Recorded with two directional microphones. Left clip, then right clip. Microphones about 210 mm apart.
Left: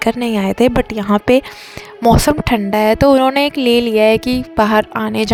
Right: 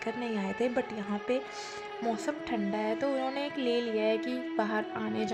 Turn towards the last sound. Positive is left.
turn(degrees=55)  # may be behind; listen again after turning